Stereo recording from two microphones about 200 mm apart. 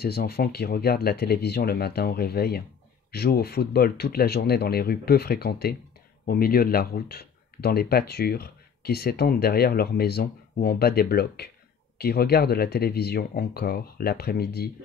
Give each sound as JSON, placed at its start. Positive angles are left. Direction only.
{"t": 0.0, "sound": "speech", "side_deg": 50}